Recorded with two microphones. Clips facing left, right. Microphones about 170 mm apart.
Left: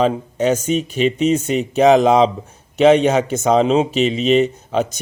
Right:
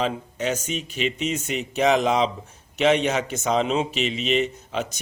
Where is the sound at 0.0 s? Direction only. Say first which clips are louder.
Left 9 dB; 40° left (ahead or behind).